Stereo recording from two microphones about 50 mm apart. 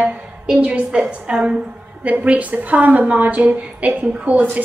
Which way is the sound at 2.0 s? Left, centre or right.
Right.